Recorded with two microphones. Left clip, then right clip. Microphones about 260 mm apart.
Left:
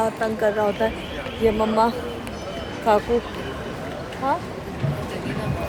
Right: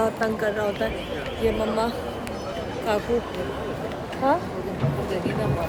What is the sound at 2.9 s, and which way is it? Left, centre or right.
Speech, centre.